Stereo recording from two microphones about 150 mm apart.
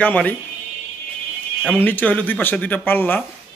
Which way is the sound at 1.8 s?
10° left (ahead or behind).